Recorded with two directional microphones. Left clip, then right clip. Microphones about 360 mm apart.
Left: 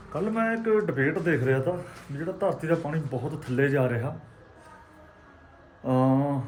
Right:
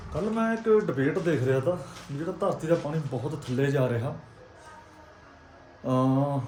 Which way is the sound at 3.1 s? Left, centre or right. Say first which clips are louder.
Left 3 dB; centre.